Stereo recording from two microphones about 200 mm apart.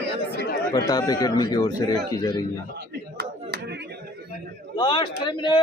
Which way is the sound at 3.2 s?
55° right (ahead or behind).